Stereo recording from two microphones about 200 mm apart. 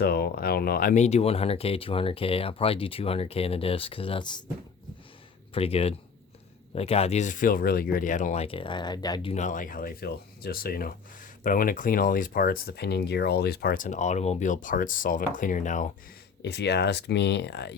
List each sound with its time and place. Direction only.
0.0 s speech: 50° left (ahead or behind); by 4.4 s 20° left (ahead or behind)
5.5 s speech: 30° left (ahead or behind)
9.3 s speech: 40° left (ahead or behind)
16.4 s speech: 55° left (ahead or behind)